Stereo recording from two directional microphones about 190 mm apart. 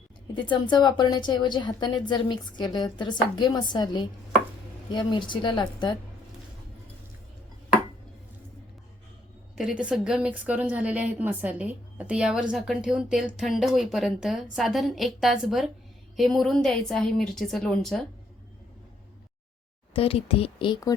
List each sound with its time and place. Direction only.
0.5 s a woman's voice: 25° left (ahead or behind)
9.6 s a woman's voice: 5° right (ahead or behind)
19.9 s a woman's voice: 30° left (ahead or behind)